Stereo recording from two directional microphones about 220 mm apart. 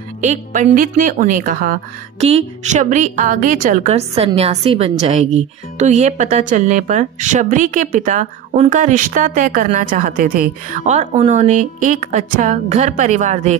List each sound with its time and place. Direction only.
0.2 s a woman's voice: 35° right (ahead or behind)